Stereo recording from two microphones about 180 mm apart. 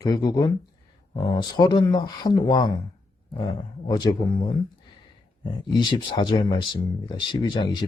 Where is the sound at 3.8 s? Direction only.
25° left (ahead or behind).